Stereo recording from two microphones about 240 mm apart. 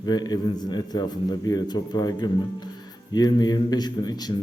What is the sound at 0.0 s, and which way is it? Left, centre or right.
A man's voice, centre.